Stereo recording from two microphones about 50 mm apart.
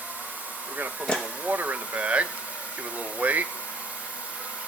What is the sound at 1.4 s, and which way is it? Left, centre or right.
Speech, right.